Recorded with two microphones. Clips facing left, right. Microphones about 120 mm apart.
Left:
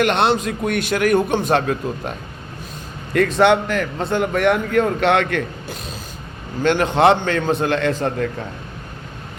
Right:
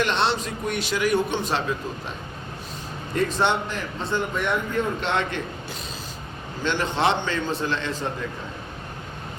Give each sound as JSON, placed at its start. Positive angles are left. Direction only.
{"t": 0.0, "sound": "a man's voice", "side_deg": 55}
{"t": 3.3, "sound": "a man's voice", "side_deg": 70}